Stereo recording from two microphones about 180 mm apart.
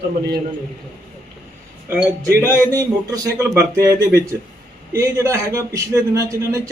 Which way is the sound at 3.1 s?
20° right (ahead or behind).